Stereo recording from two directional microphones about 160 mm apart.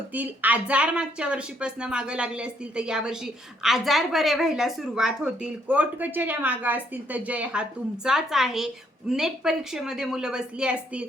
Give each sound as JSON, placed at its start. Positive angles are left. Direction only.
{"t": 0.1, "sound": "speech", "side_deg": -10}